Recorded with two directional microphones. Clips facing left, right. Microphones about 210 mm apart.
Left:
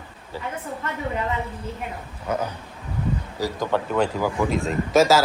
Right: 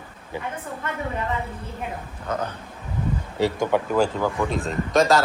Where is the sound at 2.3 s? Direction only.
10° left (ahead or behind).